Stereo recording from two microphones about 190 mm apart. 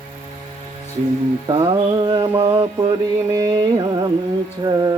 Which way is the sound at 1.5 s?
20° right (ahead or behind).